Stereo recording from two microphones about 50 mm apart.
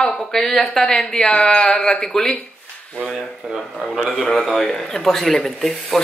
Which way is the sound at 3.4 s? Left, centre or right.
Centre.